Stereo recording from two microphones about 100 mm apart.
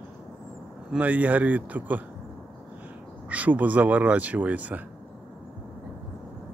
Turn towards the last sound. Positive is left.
turn(degrees=-15)  # may be behind; listen again after turning